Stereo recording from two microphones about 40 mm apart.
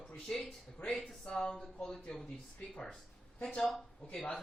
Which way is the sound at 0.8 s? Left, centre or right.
Left.